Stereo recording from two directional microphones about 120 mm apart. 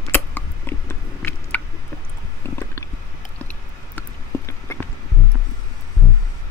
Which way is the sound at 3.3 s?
10° left (ahead or behind).